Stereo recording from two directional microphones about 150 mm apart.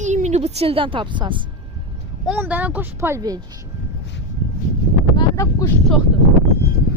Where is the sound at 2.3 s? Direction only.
10° right (ahead or behind).